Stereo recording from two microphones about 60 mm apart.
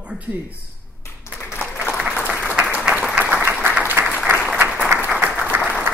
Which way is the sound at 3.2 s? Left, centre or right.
Right.